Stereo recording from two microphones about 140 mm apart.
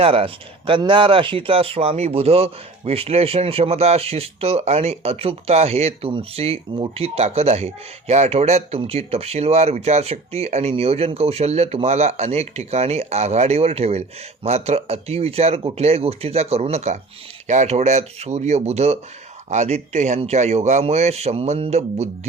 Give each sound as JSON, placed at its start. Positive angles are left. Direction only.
{"t": 0.0, "sound": "speech", "side_deg": -40}